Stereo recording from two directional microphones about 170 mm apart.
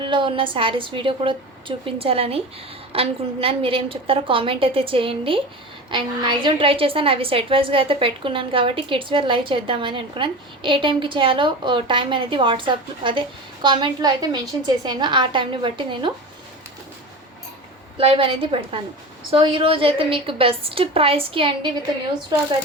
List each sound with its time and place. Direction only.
0.0 s a woman's voice: 30° right (ahead or behind)
17.9 s a woman's voice: 30° right (ahead or behind)